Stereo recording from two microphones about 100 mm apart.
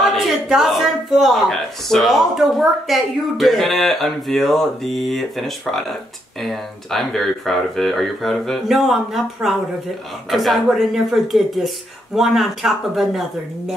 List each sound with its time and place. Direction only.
0.0 s speech: centre (ahead or behind)